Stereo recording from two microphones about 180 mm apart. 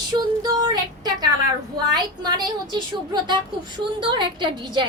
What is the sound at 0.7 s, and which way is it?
A woman's voice, 20° right (ahead or behind).